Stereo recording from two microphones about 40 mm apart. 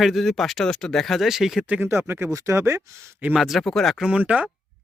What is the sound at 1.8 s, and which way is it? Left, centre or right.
Speech, right.